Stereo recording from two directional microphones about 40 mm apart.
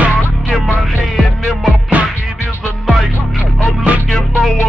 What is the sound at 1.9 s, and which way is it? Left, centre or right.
Music, right.